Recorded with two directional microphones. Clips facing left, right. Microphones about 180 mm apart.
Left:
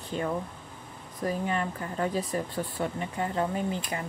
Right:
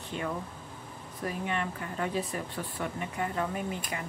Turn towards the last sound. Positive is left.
turn(degrees=30)  # may be behind; listen again after turning